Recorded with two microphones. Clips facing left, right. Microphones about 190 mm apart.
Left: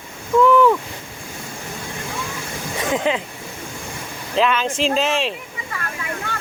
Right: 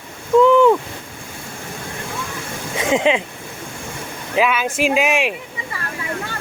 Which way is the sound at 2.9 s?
20° right (ahead or behind).